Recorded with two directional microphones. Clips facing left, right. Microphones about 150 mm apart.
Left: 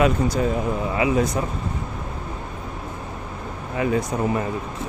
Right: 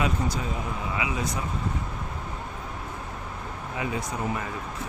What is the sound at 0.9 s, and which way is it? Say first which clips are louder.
Speech: left 10 dB; 45° left (ahead or behind).